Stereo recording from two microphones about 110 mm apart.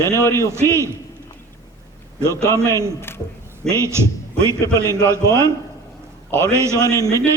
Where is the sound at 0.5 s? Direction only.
25° right (ahead or behind).